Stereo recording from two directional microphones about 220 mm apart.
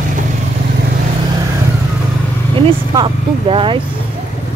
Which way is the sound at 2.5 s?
25° right (ahead or behind).